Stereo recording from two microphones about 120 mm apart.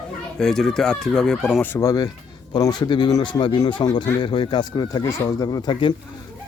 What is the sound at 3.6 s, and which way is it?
Speech, 40° left (ahead or behind).